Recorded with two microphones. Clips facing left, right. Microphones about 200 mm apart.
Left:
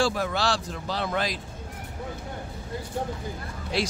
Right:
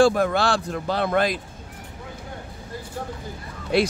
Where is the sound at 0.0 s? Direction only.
55° right (ahead or behind).